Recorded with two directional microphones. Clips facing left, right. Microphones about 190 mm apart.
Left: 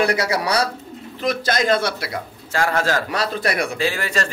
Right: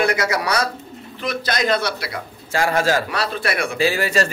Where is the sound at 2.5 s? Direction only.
10° right (ahead or behind).